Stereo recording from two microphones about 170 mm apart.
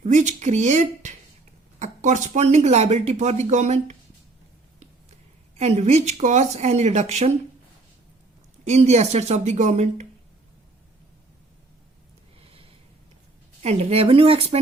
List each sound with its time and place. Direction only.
0.0 s speech: 45° right (ahead or behind)
5.5 s speech: 40° right (ahead or behind)
8.6 s speech: 40° right (ahead or behind)
12.4 s a sound: 35° right (ahead or behind)
13.6 s speech: 35° right (ahead or behind)